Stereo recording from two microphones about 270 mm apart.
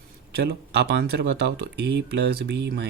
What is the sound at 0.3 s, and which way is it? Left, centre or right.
Speech, right.